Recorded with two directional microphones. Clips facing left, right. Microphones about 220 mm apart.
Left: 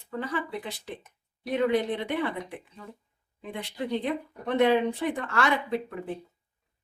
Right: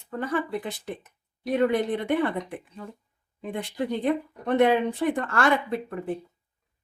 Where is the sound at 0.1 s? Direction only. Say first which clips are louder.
Right 4 dB; 50° right (ahead or behind).